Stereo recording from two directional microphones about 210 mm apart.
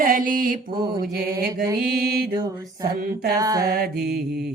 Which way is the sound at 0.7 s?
20° right (ahead or behind).